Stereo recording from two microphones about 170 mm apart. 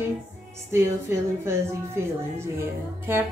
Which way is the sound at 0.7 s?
15° right (ahead or behind).